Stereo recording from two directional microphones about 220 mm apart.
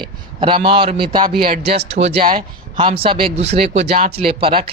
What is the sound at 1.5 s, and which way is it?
Speech, 45° right (ahead or behind).